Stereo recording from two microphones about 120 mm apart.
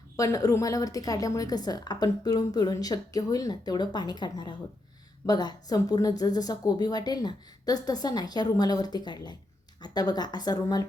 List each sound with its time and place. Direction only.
0.2 s a woman's voice: 30° left (ahead or behind)